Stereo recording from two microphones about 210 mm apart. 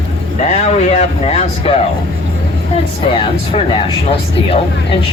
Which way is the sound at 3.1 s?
25° left (ahead or behind).